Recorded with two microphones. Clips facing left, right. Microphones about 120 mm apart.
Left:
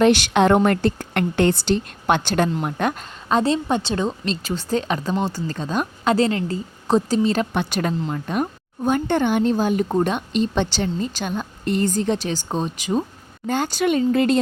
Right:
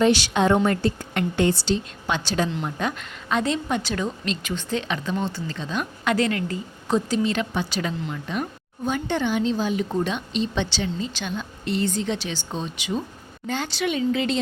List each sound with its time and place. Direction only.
0.0 s a woman's voice: 60° left (ahead or behind)
3.0 s a woman's voice: 35° left (ahead or behind)
7.5 s speech: 55° left (ahead or behind)